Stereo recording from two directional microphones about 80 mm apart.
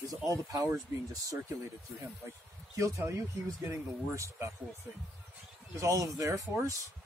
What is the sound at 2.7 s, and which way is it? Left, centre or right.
Speech, right.